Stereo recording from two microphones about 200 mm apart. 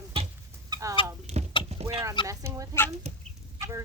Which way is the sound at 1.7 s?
30° right (ahead or behind).